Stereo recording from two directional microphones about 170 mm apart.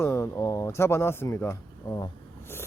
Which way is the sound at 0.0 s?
15° left (ahead or behind).